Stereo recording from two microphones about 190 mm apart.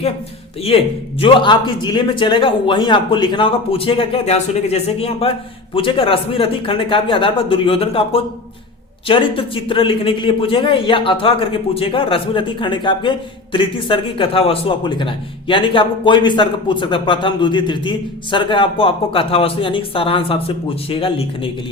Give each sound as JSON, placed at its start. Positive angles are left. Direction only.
{"t": 0.6, "sound": "a man's voice", "side_deg": 30}